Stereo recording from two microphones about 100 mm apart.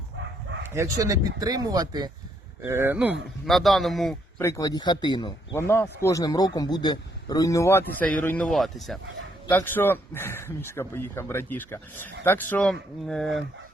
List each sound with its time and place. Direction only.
0.7 s speech: 35° right (ahead or behind)
2.6 s speech: 25° right (ahead or behind)
3.4 s speech: centre (ahead or behind)
4.4 s speech: 30° left (ahead or behind); by 5.5 s 50° left (ahead or behind)
5.5 s a man's voice: 25° left (ahead or behind)
8.4 s speech: centre (ahead or behind)
9.6 s speech: 20° left (ahead or behind)
12.6 s speech: 5° left (ahead or behind)